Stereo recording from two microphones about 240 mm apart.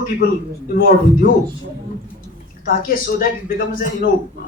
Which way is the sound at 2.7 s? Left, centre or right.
Left.